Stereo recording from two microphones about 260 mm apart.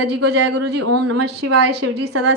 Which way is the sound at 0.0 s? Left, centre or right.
Right.